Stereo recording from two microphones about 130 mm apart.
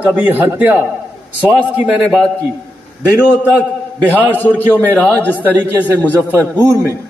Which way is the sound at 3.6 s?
15° left (ahead or behind).